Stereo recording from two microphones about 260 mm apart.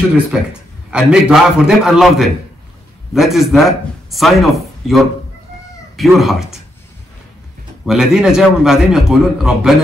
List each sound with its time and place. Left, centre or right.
0.3 s a man's voice: centre
7.8 s a man's voice: centre